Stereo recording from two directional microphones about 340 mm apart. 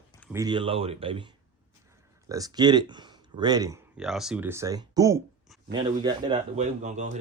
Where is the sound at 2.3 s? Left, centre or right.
Centre.